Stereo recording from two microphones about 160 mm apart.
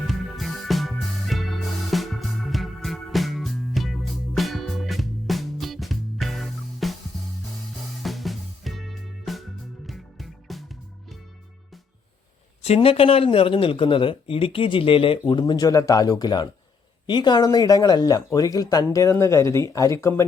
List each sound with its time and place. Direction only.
0.1 s music: centre (ahead or behind)
8.0 s music: centre (ahead or behind)
12.6 s speech: 40° left (ahead or behind); by 20.2 s 20° left (ahead or behind)